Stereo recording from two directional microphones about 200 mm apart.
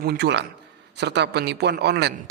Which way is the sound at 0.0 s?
55° right (ahead or behind).